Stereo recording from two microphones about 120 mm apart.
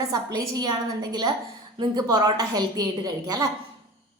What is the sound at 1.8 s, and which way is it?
A woman's voice, 35° right (ahead or behind).